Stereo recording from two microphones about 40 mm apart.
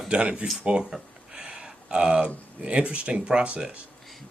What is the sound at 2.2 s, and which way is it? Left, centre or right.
Speech, right.